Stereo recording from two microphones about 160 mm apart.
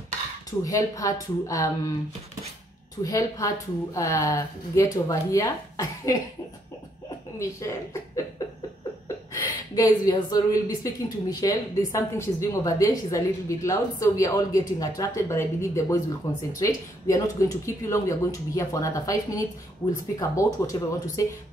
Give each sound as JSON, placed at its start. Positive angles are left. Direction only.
{"t": 0.5, "sound": "a woman's voice", "side_deg": 20}
{"t": 3.0, "sound": "a woman's voice", "side_deg": 20}
{"t": 7.3, "sound": "a woman's voice", "side_deg": 20}
{"t": 9.0, "sound": "a woman's voice", "side_deg": 20}